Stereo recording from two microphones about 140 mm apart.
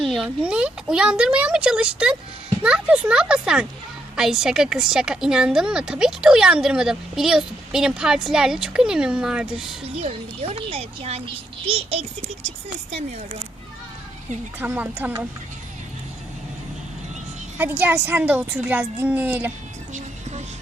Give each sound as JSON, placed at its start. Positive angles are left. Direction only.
{"t": 0.0, "sound": "a woman's voice", "side_deg": -5}
{"t": 9.8, "sound": "a child's voice", "side_deg": -45}
{"t": 14.6, "sound": "speech", "side_deg": -10}
{"t": 17.6, "sound": "speech", "side_deg": -15}